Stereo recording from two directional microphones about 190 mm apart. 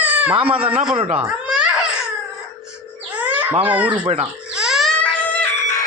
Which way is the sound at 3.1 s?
10° right (ahead or behind).